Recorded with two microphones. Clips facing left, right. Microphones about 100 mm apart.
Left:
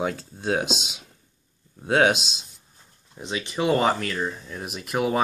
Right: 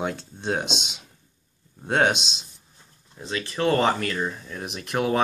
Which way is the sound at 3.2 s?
20° left (ahead or behind).